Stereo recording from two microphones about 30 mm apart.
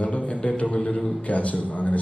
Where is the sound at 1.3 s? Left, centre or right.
Left.